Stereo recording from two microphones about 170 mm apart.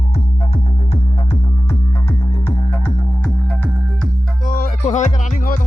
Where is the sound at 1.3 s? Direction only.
15° left (ahead or behind).